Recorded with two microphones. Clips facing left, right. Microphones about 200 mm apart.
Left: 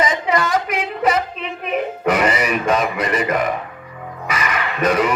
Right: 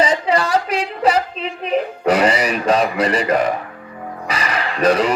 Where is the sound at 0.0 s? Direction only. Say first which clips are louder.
Right 2 dB; 30° right (ahead or behind).